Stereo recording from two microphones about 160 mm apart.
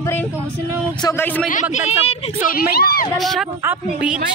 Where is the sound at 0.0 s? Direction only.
15° left (ahead or behind).